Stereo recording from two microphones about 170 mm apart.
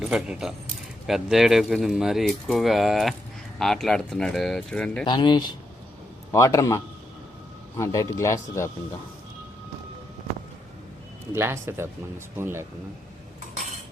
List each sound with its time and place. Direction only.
0.0 s speech: centre (ahead or behind)
5.0 s speech: 25° left (ahead or behind)
11.3 s speech: 15° right (ahead or behind)